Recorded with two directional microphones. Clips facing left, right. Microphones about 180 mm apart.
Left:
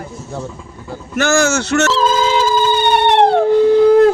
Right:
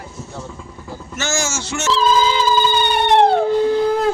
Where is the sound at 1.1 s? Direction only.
60° left (ahead or behind); by 3.1 s 80° left.